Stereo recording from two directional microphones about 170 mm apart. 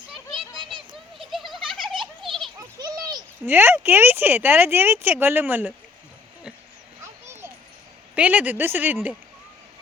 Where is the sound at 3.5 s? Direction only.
10° right (ahead or behind).